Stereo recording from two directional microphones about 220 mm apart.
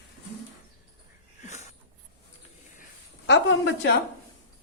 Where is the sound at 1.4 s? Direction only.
30° left (ahead or behind).